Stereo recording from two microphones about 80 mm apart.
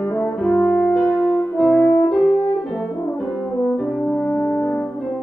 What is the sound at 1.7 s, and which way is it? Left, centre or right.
French horn, left.